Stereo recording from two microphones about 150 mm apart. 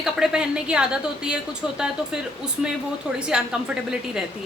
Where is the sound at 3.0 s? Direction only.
5° right (ahead or behind).